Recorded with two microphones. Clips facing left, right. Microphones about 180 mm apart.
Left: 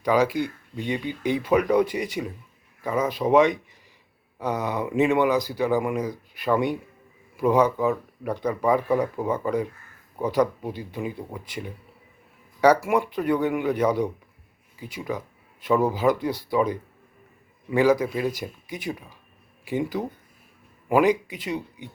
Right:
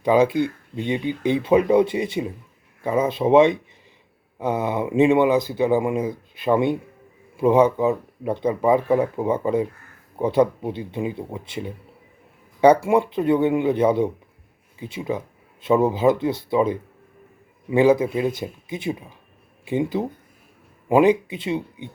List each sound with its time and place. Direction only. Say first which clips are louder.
0.0 s speech: right 4 dB; 25° right (ahead or behind)